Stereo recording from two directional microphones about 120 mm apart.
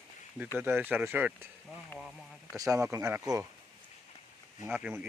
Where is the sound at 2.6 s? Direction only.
25° right (ahead or behind).